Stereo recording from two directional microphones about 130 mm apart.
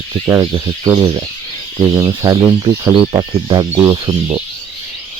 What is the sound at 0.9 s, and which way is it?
Speech, 35° right (ahead or behind).